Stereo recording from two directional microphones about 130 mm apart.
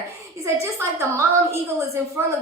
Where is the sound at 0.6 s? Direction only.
20° right (ahead or behind).